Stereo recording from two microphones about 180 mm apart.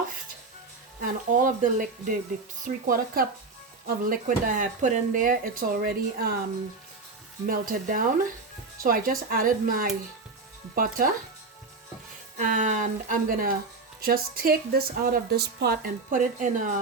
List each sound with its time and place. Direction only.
1.0 s speech: 45° right (ahead or behind)
7.4 s speech: 50° right (ahead or behind)
12.4 s speech: 45° right (ahead or behind)